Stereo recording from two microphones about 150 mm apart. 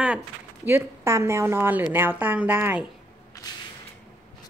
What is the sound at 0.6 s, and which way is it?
A woman's voice, 15° right (ahead or behind).